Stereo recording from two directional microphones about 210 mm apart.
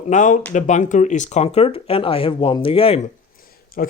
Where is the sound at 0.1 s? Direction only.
35° left (ahead or behind).